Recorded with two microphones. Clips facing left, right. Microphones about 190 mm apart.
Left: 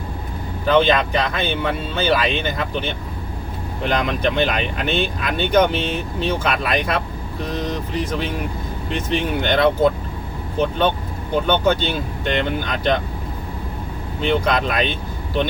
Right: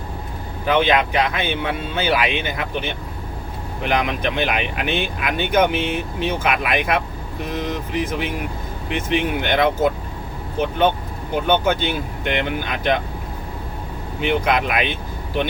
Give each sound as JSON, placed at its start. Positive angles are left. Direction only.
{"t": 0.6, "sound": "speech", "side_deg": -10}
{"t": 11.4, "sound": "speech", "side_deg": -10}
{"t": 14.2, "sound": "speech", "side_deg": -10}